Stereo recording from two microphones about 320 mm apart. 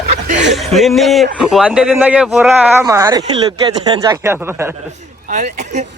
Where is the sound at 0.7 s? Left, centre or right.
Centre.